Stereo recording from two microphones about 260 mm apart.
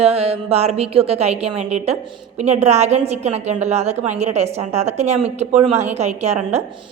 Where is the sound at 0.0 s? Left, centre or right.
Right.